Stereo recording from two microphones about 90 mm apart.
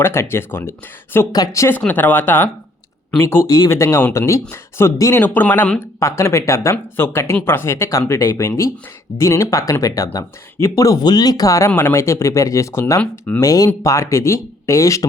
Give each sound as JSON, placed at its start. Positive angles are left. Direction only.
{"t": 0.0, "sound": "speech", "side_deg": 30}
{"t": 1.3, "sound": "speech", "side_deg": 45}
{"t": 1.8, "sound": "speech", "side_deg": 20}
{"t": 5.2, "sound": "speech", "side_deg": 20}
{"t": 6.0, "sound": "speech", "side_deg": 30}
{"t": 13.0, "sound": "speech", "side_deg": 20}
{"t": 13.4, "sound": "speech", "side_deg": 40}